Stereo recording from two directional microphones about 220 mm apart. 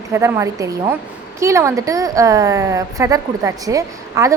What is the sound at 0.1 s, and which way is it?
A woman's voice, 15° right (ahead or behind).